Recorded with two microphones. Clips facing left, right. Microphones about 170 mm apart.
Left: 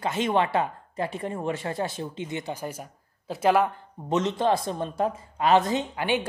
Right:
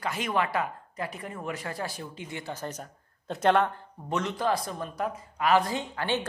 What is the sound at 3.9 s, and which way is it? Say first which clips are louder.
Speech: left 6 dB; 20° left (ahead or behind).